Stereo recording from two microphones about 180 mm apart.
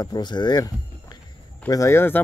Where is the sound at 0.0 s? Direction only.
25° left (ahead or behind).